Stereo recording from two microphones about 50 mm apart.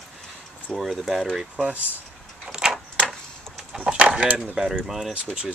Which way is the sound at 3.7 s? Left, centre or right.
Centre.